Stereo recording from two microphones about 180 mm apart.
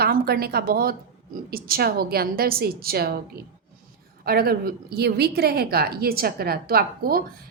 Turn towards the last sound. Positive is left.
turn(degrees=-55)  # may be behind; listen again after turning